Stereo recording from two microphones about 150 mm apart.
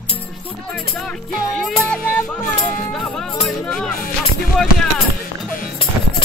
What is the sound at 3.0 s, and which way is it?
Music, 5° left (ahead or behind).